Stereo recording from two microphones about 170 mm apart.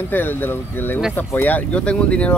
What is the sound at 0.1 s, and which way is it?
Speech, 10° left (ahead or behind).